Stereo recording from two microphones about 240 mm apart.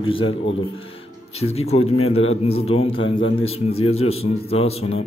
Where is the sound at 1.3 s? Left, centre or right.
Left.